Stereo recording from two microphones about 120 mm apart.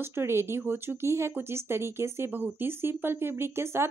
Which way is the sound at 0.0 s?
20° right (ahead or behind).